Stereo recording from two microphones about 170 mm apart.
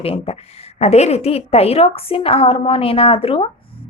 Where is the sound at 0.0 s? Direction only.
35° left (ahead or behind).